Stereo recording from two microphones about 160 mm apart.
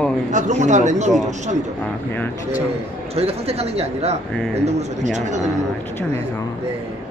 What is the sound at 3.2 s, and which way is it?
Speech, 40° right (ahead or behind).